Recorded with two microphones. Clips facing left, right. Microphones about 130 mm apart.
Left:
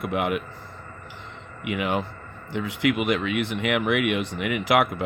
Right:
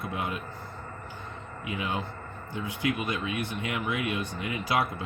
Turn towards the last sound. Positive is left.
turn(degrees=90)